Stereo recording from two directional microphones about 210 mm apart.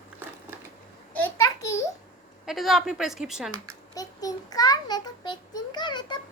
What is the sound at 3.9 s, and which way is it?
A child's voice, 15° left (ahead or behind).